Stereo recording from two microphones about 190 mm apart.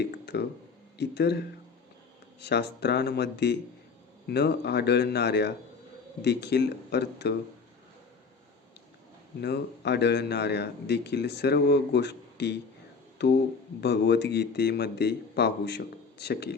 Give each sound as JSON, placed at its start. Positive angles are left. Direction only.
{"t": 0.0, "sound": "a man's voice", "side_deg": 60}
{"t": 9.4, "sound": "a man's voice", "side_deg": 60}